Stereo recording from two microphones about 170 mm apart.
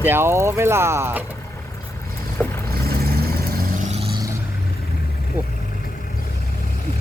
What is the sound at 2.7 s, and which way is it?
Vehicle, 65° right (ahead or behind).